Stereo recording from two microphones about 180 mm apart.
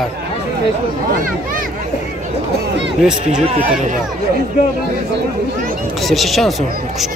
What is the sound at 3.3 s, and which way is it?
Speech, 40° right (ahead or behind).